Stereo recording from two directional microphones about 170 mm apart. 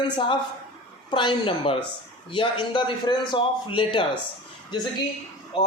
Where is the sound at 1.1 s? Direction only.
30° left (ahead or behind).